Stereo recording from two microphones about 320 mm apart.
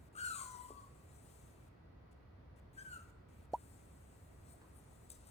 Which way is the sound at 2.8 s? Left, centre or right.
Centre.